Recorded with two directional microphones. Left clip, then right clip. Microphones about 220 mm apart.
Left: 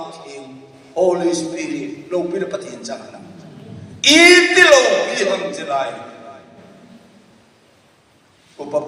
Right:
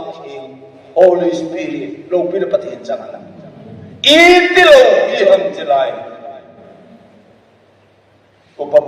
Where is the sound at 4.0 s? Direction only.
25° left (ahead or behind).